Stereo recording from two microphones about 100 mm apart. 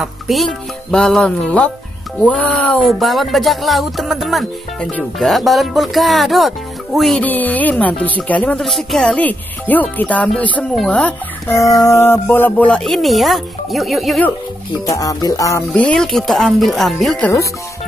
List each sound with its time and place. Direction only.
0.0 s speech: centre (ahead or behind)
2.8 s speech: centre (ahead or behind)
7.2 s speech: 15° left (ahead or behind)
8.5 s speech: 5° left (ahead or behind)
11.4 s speech: 30° left (ahead or behind); by 14.2 s centre (ahead or behind)
14.9 s speech: 35° left (ahead or behind)
15.7 s speech: 10° left (ahead or behind)